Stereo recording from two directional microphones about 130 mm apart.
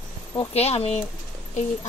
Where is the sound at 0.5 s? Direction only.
50° left (ahead or behind).